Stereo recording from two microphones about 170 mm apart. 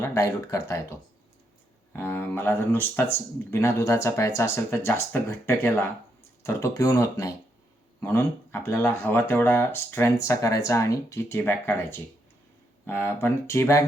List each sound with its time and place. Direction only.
0.0 s speech: 15° left (ahead or behind)